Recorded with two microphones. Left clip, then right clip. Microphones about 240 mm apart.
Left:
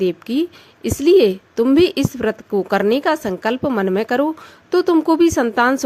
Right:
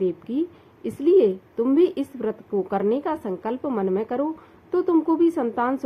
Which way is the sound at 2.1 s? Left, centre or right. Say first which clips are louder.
Left 6 dB; left.